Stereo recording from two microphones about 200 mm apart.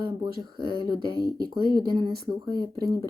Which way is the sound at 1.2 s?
20° left (ahead or behind).